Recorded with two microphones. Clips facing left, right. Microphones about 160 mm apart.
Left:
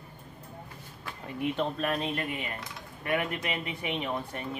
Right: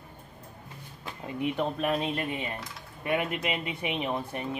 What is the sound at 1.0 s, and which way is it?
Speech, 15° right (ahead or behind).